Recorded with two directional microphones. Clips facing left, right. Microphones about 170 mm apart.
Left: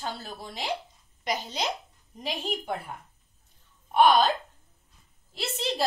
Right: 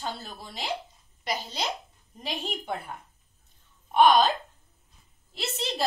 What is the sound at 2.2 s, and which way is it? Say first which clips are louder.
Speech: left 2 dB; 10° left (ahead or behind).